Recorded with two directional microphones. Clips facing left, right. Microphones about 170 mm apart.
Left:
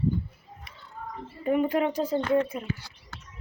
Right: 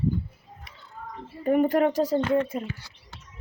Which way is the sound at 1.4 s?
45° right (ahead or behind).